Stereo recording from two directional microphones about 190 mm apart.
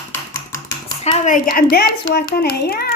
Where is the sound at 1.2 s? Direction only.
45° left (ahead or behind).